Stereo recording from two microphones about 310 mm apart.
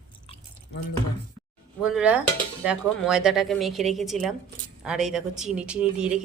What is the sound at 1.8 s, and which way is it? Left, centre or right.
A woman's voice, centre.